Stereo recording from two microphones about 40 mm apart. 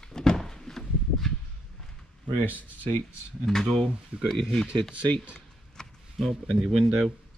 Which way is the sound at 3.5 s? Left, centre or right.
Centre.